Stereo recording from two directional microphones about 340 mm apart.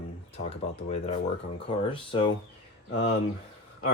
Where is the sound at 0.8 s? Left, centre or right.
Centre.